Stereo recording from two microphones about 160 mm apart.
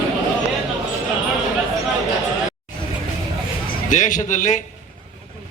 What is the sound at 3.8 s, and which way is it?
Speech, 50° left (ahead or behind).